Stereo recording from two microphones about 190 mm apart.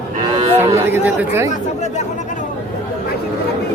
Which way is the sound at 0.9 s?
10° right (ahead or behind).